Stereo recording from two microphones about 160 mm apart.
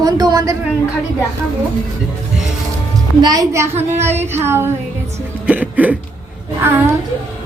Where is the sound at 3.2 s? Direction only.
20° right (ahead or behind).